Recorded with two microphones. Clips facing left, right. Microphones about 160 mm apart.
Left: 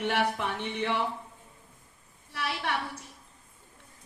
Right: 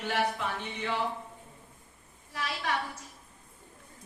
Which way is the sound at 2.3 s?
65° left (ahead or behind).